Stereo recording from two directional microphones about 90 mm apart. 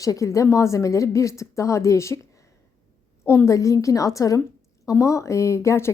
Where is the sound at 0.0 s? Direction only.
40° left (ahead or behind).